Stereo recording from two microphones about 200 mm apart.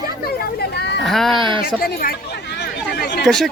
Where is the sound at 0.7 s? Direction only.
55° left (ahead or behind).